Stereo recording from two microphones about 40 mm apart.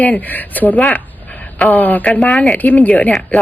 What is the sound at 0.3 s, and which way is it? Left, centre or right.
A woman's voice, left.